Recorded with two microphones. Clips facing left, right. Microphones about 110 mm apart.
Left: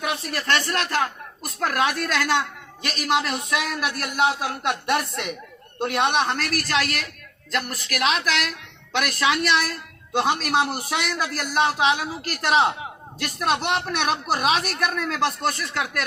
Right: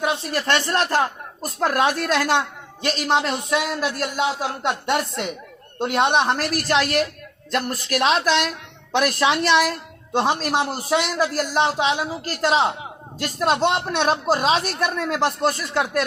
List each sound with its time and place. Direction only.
0.0 s a man's voice: 30° right (ahead or behind)